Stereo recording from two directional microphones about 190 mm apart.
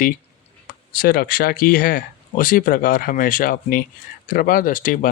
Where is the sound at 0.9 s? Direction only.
50° left (ahead or behind).